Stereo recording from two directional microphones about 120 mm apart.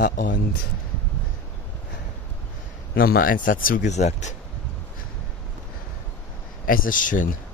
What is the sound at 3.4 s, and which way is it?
Speech, 85° left.